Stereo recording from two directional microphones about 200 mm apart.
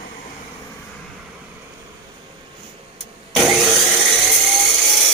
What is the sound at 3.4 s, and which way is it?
Wood, centre (ahead or behind).